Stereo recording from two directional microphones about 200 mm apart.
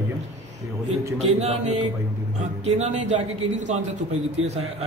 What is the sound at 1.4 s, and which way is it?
A man's voice, 30° right (ahead or behind).